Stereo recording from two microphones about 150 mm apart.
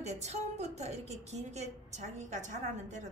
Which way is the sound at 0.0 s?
45° right (ahead or behind).